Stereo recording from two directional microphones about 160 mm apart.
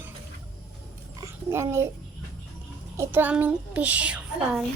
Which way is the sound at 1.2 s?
15° right (ahead or behind).